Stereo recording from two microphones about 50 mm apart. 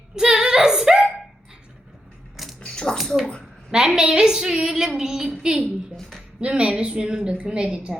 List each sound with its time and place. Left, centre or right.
0.2 s female singing: centre
2.3 s mechanisms: centre
2.6 s a sound: centre
3.7 s a woman's voice: centre
6.0 s a woman's voice: centre
6.4 s a woman's voice: right